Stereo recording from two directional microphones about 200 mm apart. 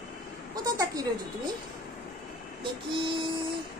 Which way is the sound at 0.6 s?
20° right (ahead or behind).